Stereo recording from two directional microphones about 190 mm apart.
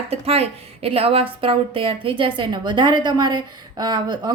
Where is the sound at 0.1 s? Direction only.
30° right (ahead or behind).